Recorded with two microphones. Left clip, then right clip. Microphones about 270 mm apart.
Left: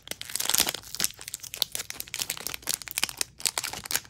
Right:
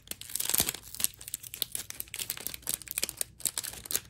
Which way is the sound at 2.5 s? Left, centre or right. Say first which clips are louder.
Left 7 dB; centre.